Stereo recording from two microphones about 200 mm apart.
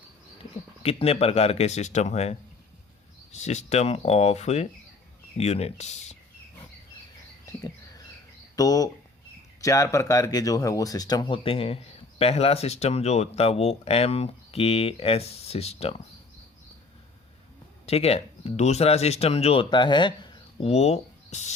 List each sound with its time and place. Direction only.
0.8 s speech: 30° left (ahead or behind)
3.3 s speech: 35° left (ahead or behind)
7.4 s bird: 15° left (ahead or behind)
8.5 s speech: 20° left (ahead or behind)
17.8 s speech: 30° left (ahead or behind)